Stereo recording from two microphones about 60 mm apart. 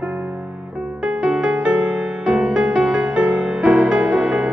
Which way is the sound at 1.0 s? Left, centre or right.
Centre.